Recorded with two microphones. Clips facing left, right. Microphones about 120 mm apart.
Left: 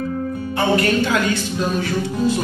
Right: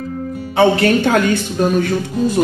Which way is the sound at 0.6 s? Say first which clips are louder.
Right 5 dB; 55° right (ahead or behind).